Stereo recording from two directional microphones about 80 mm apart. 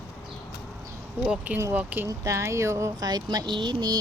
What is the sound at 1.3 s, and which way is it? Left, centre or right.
Speech, centre.